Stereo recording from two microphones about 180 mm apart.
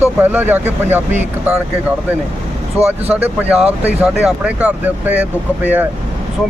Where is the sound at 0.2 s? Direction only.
10° right (ahead or behind).